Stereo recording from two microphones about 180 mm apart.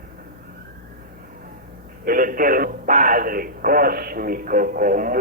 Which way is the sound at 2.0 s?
50° right (ahead or behind).